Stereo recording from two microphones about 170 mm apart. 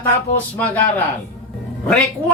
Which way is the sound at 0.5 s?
10° left (ahead or behind).